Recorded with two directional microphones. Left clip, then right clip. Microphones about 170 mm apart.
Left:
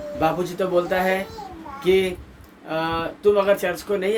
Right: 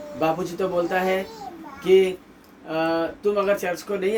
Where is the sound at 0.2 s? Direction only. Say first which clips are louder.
Left 1 dB; 25° left (ahead or behind).